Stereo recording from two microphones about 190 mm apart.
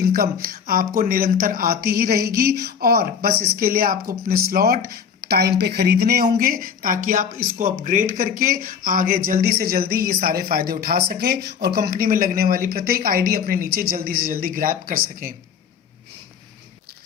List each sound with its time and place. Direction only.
0.0 s speech: 50° right (ahead or behind)